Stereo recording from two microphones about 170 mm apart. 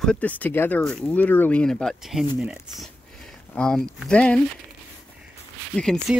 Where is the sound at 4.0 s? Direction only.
5° left (ahead or behind).